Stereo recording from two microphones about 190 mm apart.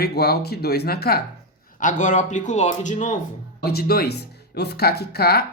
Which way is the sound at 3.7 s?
55° left (ahead or behind).